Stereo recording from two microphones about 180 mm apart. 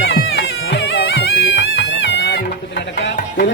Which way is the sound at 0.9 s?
90° left.